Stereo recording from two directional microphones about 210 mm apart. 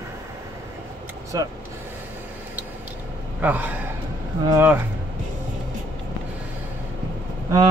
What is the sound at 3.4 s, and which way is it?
A man's voice, 10° right (ahead or behind).